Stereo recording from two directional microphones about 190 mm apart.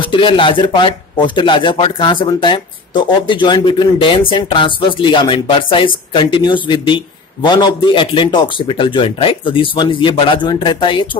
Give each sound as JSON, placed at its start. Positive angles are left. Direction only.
{"t": 0.0, "sound": "speech", "side_deg": 25}